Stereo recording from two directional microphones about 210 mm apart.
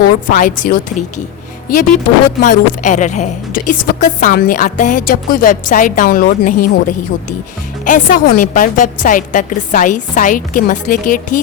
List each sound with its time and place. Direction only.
0.3 s a woman's voice: 40° left (ahead or behind)
2.4 s a woman's voice: 35° left (ahead or behind)